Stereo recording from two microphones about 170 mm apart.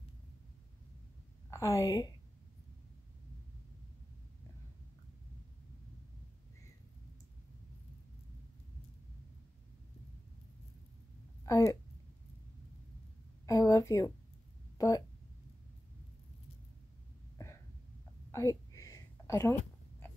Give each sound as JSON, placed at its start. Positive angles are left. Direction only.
{"t": 1.5, "sound": "a woman's voice", "side_deg": 20}
{"t": 11.4, "sound": "speech", "side_deg": 20}
{"t": 13.5, "sound": "a woman's voice", "side_deg": 20}
{"t": 18.3, "sound": "a sound", "side_deg": 20}